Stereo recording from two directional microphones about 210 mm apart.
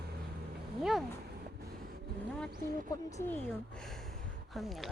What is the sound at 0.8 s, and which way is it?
Speech, centre (ahead or behind).